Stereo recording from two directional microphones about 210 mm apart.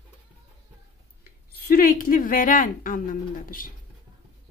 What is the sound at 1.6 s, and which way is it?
A woman's voice, 45° left (ahead or behind).